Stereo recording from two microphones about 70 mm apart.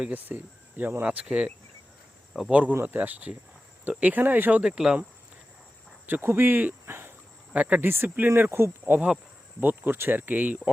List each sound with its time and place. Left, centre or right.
0.0 s speech: right
2.5 s speech: centre
4.6 s speech: centre
6.1 s speech: right
7.5 s speech: centre
7.8 s speech: right
8.8 s speech: right